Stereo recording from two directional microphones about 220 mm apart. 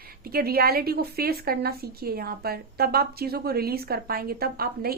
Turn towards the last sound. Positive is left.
turn(degrees=-45)  # may be behind; listen again after turning